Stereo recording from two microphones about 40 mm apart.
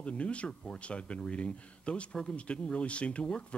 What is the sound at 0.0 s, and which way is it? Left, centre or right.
Speech, left.